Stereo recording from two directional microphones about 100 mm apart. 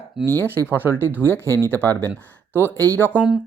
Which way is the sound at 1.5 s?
20° left (ahead or behind).